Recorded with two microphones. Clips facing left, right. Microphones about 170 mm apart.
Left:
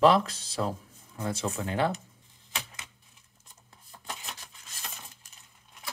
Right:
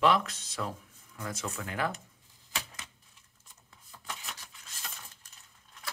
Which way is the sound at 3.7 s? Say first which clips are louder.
Left 2 dB; 35° left (ahead or behind).